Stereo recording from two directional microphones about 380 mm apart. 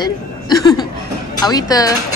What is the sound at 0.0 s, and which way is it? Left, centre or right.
Chuckle, centre.